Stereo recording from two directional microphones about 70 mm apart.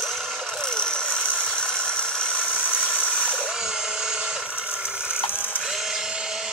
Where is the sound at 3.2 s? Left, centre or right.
Centre.